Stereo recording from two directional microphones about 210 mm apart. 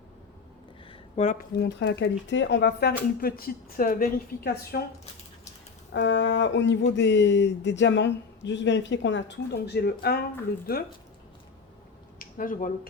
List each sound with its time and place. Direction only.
0.9 s speech: 30° left (ahead or behind)
5.9 s speech: 60° left (ahead or behind)
12.2 s speech: 40° left (ahead or behind)